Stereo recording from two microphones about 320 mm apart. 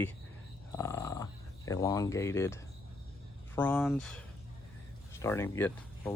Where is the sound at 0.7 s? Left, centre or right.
Centre.